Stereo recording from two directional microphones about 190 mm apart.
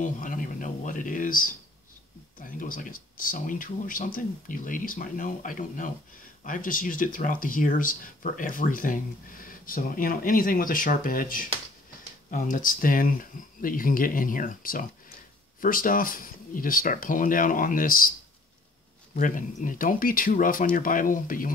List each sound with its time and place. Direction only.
0.0 s a sound: 45° left (ahead or behind)
2.3 s speech: 45° left (ahead or behind)
19.1 s speech: 45° left (ahead or behind)